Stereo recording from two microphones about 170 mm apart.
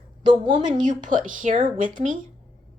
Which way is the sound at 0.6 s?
50° right (ahead or behind).